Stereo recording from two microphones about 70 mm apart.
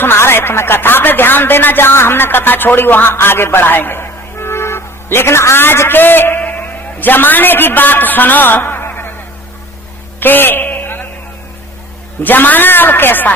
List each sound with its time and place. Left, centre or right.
0.0 s speech: left
10.2 s a sound: left
12.2 s a man's voice: left